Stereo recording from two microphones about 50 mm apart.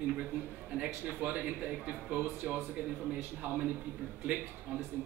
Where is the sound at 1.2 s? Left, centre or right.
Right.